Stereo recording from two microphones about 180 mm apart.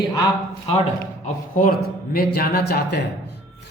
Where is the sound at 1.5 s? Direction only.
55° left (ahead or behind).